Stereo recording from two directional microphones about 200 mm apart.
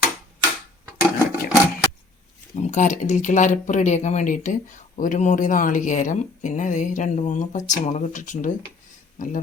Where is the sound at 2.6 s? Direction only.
40° left (ahead or behind).